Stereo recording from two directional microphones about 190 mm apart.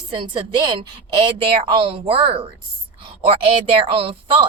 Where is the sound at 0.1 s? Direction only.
25° right (ahead or behind).